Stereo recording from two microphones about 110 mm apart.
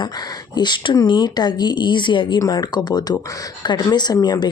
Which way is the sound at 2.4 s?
35° left (ahead or behind).